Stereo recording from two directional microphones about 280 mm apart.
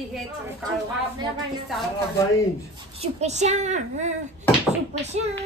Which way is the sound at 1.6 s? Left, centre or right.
Centre.